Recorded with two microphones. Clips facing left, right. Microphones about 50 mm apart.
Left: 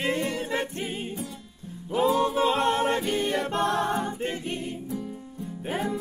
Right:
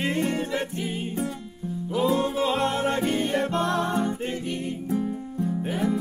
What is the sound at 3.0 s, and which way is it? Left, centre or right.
Music, right.